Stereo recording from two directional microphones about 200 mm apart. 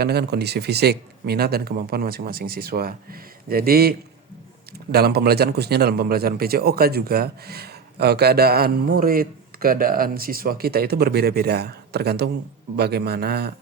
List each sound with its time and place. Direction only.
0.0 s a man's voice: 55° right (ahead or behind)